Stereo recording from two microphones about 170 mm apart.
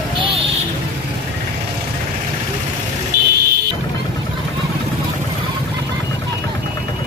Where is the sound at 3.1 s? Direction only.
55° right (ahead or behind).